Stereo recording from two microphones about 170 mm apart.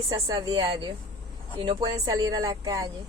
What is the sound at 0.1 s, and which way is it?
Speech, 20° right (ahead or behind).